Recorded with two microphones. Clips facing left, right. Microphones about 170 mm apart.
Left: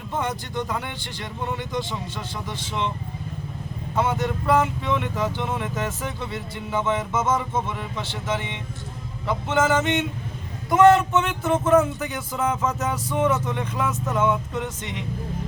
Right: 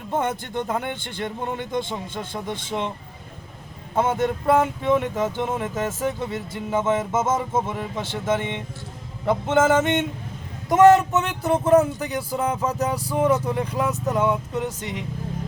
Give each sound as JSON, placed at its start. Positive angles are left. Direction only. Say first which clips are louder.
{"t": 0.1, "sound": "speech", "louder": "right 3 dB", "side_deg": -50}
{"t": 3.9, "sound": "speech", "louder": "right 2 dB", "side_deg": -50}